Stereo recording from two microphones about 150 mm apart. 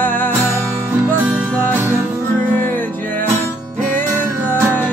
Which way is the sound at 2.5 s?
10° left (ahead or behind).